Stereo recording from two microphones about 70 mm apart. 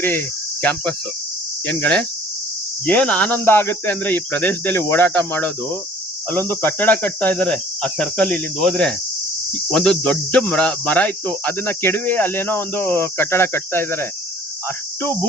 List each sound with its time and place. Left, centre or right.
0.0 s cricket: left
1.6 s speech: left